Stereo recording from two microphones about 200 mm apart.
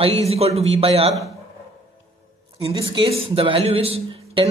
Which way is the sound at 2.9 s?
30° right (ahead or behind).